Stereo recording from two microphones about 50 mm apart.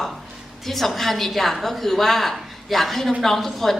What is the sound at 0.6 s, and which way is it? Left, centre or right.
A woman's voice, centre.